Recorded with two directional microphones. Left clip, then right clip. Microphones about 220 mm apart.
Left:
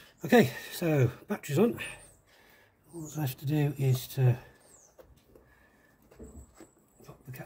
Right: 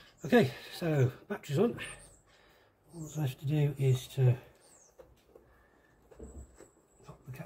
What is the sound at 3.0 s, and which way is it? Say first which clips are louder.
Speech: left 2 dB; 35° left (ahead or behind).